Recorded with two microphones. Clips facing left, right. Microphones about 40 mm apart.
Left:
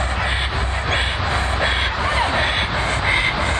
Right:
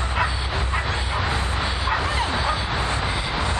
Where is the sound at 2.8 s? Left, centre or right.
Left.